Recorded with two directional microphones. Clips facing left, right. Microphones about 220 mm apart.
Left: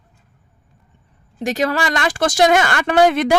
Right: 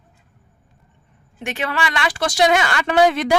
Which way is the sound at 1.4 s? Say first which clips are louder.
Left 5 dB; 40° left (ahead or behind).